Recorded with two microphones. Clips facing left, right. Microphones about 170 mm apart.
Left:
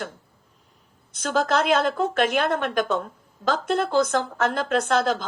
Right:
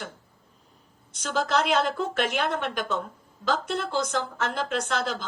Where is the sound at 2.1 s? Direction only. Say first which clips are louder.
Left 4 dB; 55° left (ahead or behind).